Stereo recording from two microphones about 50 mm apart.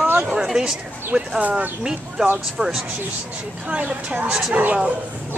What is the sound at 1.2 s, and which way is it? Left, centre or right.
Speech, right.